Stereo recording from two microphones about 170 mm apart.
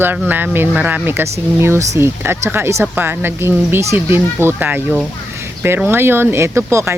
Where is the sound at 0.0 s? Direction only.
10° right (ahead or behind).